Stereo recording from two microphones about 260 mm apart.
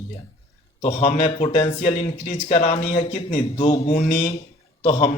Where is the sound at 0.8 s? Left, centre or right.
Left.